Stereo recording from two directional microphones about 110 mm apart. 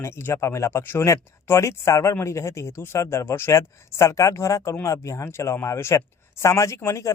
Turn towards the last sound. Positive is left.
turn(degrees=25)  # may be behind; listen again after turning